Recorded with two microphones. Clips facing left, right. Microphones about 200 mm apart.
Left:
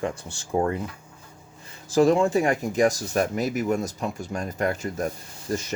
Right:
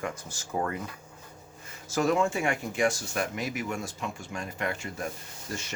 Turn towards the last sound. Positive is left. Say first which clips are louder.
# left 9 dB
turn(degrees=40)  # may be behind; listen again after turning